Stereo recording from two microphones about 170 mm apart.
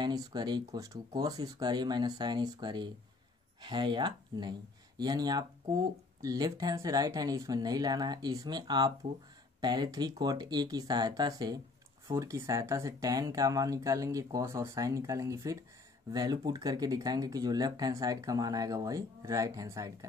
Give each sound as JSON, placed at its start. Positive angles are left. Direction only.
{"t": 0.0, "sound": "speech", "side_deg": -25}